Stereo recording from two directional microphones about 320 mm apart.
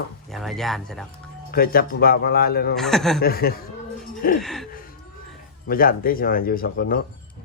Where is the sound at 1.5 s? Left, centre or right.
Left.